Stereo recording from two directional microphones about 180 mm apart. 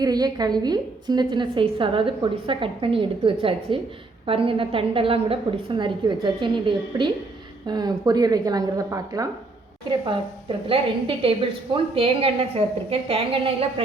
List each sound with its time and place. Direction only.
0.0 s a woman's voice: 20° right (ahead or behind)
10.7 s a woman's voice: 30° right (ahead or behind)